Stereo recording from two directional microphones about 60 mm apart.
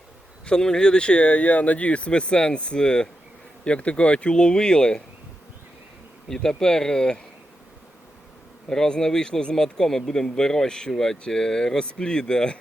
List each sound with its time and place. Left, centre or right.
0.4 s speech: centre
6.2 s speech: centre
8.7 s speech: centre